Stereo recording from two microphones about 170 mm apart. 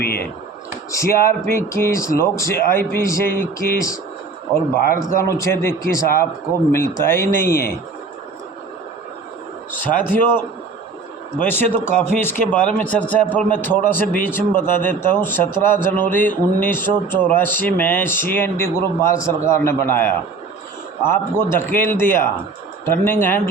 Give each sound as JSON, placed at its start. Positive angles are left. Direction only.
{"t": 0.0, "sound": "a sound", "side_deg": 65}
{"t": 0.9, "sound": "a man's voice", "side_deg": 15}
{"t": 4.7, "sound": "a man's voice", "side_deg": 65}
{"t": 5.3, "sound": "a man's voice", "side_deg": 15}
{"t": 10.0, "sound": "a man's voice", "side_deg": 10}
{"t": 11.4, "sound": "a man's voice", "side_deg": 10}